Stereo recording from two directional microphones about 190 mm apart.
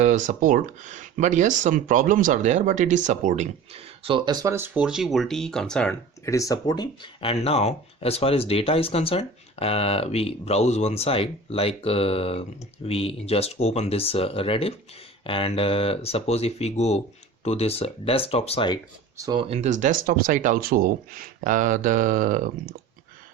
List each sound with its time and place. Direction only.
0.0 s speech: 40° right (ahead or behind); by 18.8 s 30° left (ahead or behind)
19.2 s speech: 25° right (ahead or behind); by 22.7 s 45° right (ahead or behind)